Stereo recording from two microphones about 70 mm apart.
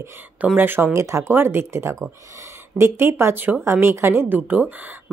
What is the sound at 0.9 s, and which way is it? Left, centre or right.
Speech, right.